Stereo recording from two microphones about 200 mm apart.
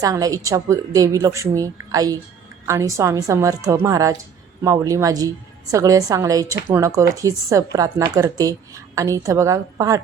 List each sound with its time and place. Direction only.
0.0 s a woman's voice: 15° right (ahead or behind)